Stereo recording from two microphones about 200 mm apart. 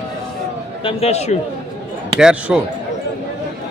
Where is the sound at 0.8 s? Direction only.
30° left (ahead or behind).